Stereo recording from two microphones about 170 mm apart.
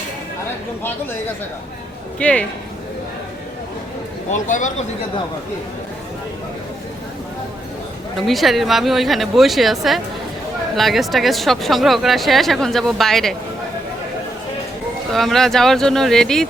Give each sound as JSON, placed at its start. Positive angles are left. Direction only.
{"t": 2.1, "sound": "speech", "side_deg": 5}
{"t": 4.3, "sound": "speech", "side_deg": 45}
{"t": 8.3, "sound": "speech", "side_deg": 0}
{"t": 15.1, "sound": "speech", "side_deg": 0}